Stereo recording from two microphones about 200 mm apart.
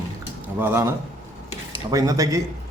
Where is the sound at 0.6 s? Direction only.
10° right (ahead or behind).